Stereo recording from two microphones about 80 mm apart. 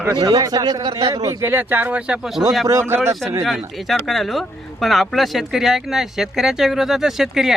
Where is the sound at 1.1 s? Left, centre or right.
Right.